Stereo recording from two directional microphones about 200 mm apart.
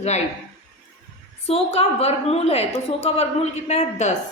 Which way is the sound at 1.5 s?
30° left (ahead or behind).